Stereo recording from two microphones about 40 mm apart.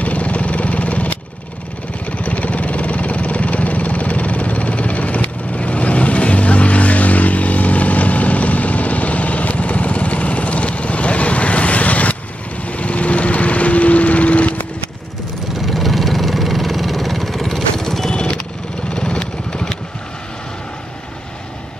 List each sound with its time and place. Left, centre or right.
0.0 s vehicle: left
15.6 s vehicle: centre
18.1 s lawn mower: left
18.9 s vehicle: left